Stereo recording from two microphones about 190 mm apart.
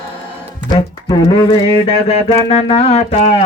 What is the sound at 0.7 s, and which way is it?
Mantra, 25° left (ahead or behind).